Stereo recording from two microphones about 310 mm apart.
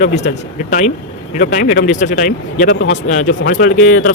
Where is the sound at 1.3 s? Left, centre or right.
Left.